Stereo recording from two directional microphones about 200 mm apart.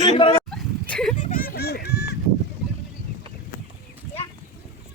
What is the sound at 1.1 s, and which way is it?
Honk, 40° left (ahead or behind).